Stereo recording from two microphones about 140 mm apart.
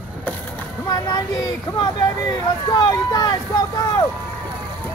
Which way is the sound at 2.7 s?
25° left (ahead or behind).